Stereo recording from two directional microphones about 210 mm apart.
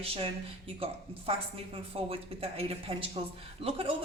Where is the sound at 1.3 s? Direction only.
25° right (ahead or behind).